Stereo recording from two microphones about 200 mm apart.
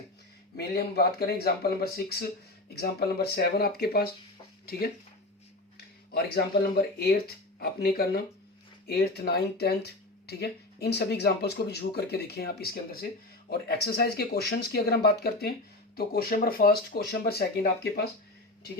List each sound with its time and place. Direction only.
0.5 s speech: 50° left (ahead or behind)
6.1 s speech: 50° left (ahead or behind)